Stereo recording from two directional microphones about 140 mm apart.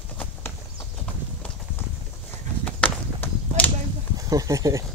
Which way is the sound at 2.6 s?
10° left (ahead or behind).